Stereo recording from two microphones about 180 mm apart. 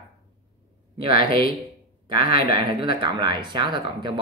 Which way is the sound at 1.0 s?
25° right (ahead or behind).